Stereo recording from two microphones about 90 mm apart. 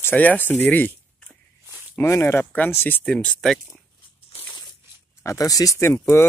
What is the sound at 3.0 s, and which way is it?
Speech, 10° left (ahead or behind).